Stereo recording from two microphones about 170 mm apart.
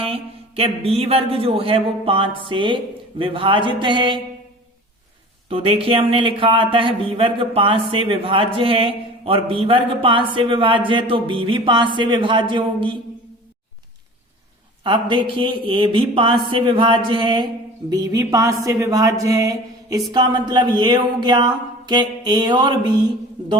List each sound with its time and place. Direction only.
0.0 s speech: 35° right (ahead or behind)
5.5 s speech: 35° right (ahead or behind)
14.8 s speech: 30° right (ahead or behind)